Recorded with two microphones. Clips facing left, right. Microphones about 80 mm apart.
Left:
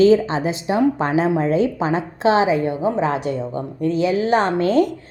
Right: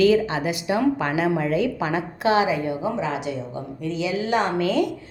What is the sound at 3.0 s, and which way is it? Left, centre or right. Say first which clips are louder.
A woman's voice: left 6 dB; left.